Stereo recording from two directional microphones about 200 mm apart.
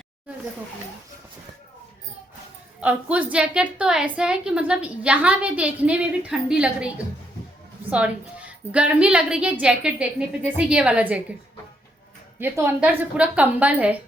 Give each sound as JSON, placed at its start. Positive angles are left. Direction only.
{"t": 2.8, "sound": "a woman's voice", "side_deg": -10}
{"t": 12.4, "sound": "a woman's voice", "side_deg": -10}